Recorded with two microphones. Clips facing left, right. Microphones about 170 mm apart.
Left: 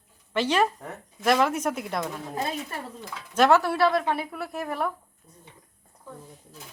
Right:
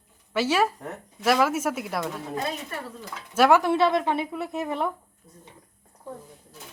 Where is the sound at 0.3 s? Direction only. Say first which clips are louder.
Even; 5° right (ahead or behind).